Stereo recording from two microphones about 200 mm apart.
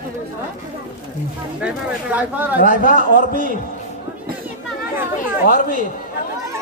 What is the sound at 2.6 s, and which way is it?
Speech, 45° left (ahead or behind).